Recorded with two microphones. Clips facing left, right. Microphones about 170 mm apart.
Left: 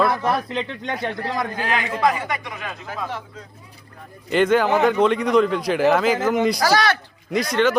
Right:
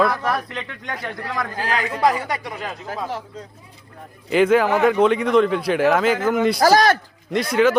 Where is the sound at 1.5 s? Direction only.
35° right (ahead or behind).